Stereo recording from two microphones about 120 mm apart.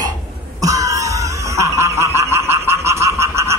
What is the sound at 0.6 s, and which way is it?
Cough, 30° right (ahead or behind).